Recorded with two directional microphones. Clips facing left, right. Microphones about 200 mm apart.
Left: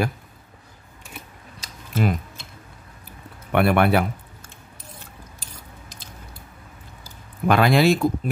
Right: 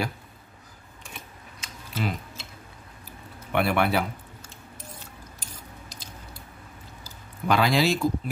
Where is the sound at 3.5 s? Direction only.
55° left (ahead or behind).